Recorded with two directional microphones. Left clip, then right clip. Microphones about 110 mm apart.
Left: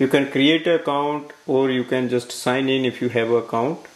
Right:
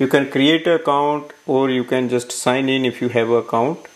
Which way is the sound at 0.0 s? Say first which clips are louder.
Right 2 dB; 30° right (ahead or behind).